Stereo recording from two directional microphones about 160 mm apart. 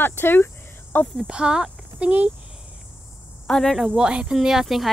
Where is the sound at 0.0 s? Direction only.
15° left (ahead or behind).